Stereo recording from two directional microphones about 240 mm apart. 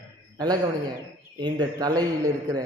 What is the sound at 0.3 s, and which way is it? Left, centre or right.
A man's voice, centre.